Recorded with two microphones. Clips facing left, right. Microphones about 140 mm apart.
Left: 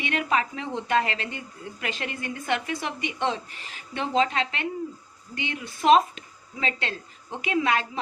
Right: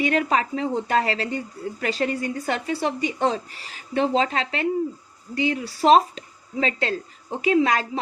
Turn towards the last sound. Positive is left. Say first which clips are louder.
# right 5 dB
turn(degrees=-35)  # may be behind; listen again after turning